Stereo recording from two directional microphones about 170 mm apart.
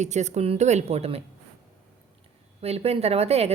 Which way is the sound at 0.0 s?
40° right (ahead or behind).